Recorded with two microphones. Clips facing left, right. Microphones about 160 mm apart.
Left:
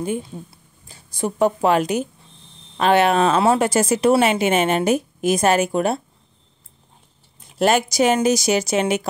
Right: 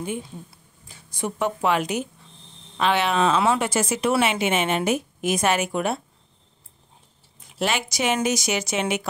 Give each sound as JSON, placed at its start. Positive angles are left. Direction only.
{"t": 0.0, "sound": "speech", "side_deg": 35}
{"t": 7.5, "sound": "speech", "side_deg": 45}